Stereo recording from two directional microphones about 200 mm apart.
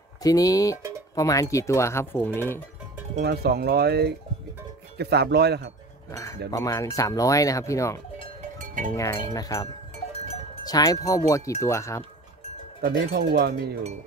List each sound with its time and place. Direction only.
0.2 s speech: 20° left (ahead or behind)
3.2 s cowbell: 55° right (ahead or behind)
4.9 s speech: 55° right (ahead or behind)
6.5 s speech: 15° left (ahead or behind)
8.5 s cowbell: 40° right (ahead or behind)
8.9 s speech: 15° left (ahead or behind)
10.2 s cowbell: 30° left (ahead or behind)
10.6 s speech: 20° left (ahead or behind)
12.8 s speech: 50° right (ahead or behind)